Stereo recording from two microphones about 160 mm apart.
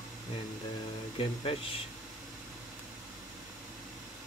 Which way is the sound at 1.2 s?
35° left (ahead or behind).